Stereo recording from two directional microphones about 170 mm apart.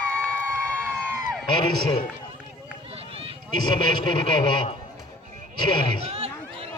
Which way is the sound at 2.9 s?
35° right (ahead or behind).